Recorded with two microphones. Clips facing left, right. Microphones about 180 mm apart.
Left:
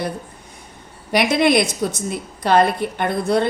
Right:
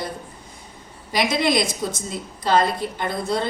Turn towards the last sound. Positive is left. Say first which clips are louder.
# left 5 dB
turn(degrees=65)  # may be behind; listen again after turning